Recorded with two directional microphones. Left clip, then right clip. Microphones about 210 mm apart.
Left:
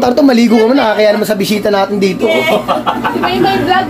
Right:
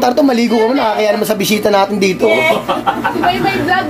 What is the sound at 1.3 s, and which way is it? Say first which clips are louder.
Speech: even; 25° right (ahead or behind).